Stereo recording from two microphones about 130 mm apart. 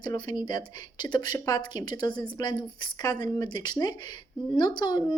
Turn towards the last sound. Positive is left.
turn(degrees=35)  # may be behind; listen again after turning